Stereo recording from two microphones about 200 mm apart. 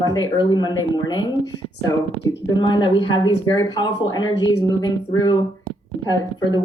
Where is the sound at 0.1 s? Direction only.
20° left (ahead or behind).